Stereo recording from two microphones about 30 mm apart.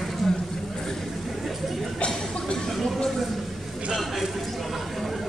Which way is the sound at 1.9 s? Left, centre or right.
Left.